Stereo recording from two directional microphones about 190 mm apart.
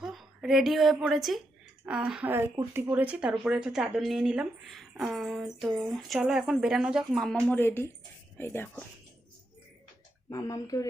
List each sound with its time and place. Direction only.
0.0 s a woman's voice: centre (ahead or behind)
7.4 s speech: 10° left (ahead or behind)
10.2 s speech: 15° left (ahead or behind)